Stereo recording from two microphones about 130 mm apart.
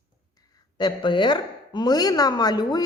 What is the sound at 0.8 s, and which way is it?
Speech, 35° left (ahead or behind).